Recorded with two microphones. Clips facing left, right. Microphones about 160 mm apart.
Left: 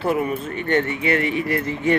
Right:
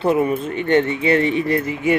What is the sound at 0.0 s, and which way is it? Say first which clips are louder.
Speech: right 4 dB; 20° right (ahead or behind).